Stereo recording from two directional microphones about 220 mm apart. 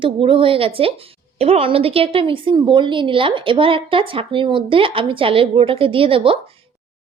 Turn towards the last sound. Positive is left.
turn(degrees=-25)  # may be behind; listen again after turning